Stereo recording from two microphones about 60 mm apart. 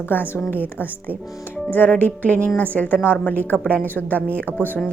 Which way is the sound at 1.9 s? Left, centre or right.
Left.